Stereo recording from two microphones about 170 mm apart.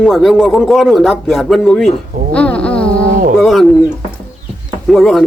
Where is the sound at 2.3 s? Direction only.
5° left (ahead or behind).